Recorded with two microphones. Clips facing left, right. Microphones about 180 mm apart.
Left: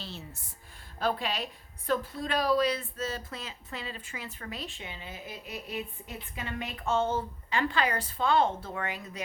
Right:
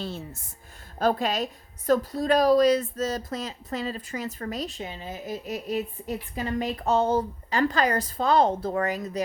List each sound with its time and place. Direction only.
0.0 s a woman's voice: 50° right (ahead or behind)